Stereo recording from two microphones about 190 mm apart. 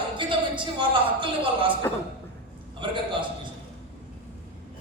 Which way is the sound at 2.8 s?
25° right (ahead or behind).